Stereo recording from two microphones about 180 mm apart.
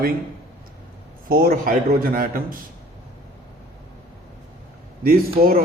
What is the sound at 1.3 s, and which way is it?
A man's voice, 55° right (ahead or behind).